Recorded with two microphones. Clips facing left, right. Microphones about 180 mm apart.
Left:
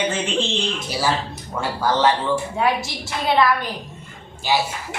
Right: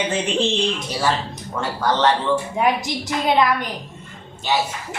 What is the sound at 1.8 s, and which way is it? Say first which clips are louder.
Speech: even; 10° left (ahead or behind).